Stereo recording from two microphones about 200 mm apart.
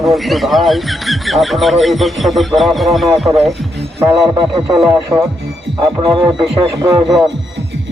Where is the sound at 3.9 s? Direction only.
15° right (ahead or behind).